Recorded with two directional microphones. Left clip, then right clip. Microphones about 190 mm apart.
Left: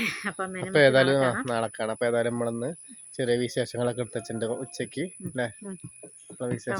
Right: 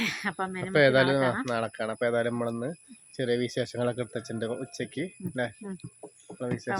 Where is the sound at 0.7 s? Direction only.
30° left (ahead or behind).